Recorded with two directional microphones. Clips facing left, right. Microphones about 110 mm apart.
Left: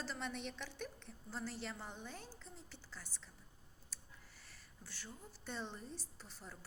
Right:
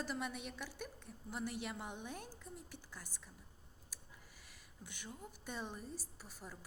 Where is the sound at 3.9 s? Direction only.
10° right (ahead or behind).